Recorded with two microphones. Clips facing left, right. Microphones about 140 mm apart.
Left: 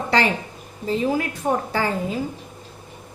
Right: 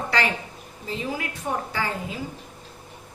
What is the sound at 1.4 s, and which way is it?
Speech, 45° left (ahead or behind).